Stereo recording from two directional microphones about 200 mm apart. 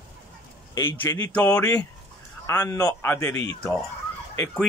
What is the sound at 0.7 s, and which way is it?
A man's voice, 15° left (ahead or behind).